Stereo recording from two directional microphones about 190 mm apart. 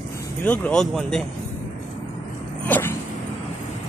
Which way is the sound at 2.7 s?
10° left (ahead or behind).